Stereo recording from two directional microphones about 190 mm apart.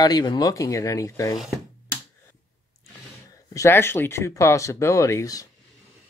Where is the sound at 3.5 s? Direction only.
15° left (ahead or behind).